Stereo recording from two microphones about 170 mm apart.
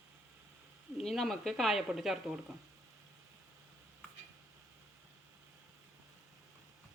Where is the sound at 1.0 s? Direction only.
Centre (ahead or behind).